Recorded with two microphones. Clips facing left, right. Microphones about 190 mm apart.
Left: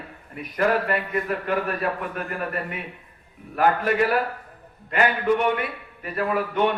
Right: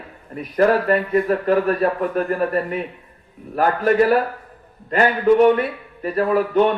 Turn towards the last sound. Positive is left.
turn(degrees=-35)  # may be behind; listen again after turning